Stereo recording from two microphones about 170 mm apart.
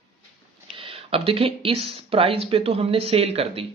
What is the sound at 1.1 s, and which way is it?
Speech, 35° right (ahead or behind).